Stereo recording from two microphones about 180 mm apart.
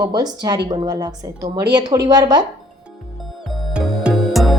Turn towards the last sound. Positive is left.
turn(degrees=0)  # may be behind; listen again after turning